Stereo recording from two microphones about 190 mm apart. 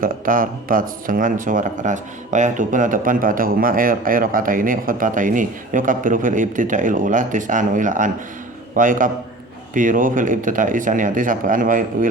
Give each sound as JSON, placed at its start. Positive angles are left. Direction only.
{"t": 0.0, "sound": "a man's voice", "side_deg": -45}